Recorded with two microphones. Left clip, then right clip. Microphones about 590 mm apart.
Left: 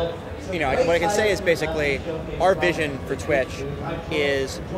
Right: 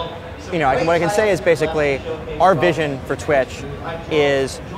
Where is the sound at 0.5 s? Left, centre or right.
Right.